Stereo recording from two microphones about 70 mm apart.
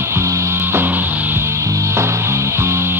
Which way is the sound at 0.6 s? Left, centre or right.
Right.